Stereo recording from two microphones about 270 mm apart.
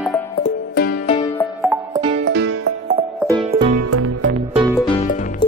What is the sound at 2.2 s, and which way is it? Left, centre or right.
Music, right.